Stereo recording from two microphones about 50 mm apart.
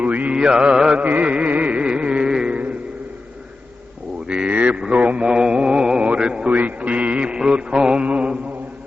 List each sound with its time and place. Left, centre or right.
0.0 s mantra: right
0.9 s music: right
4.4 s mantra: right
6.1 s a sound: centre
6.6 s music: right
7.5 s mantra: centre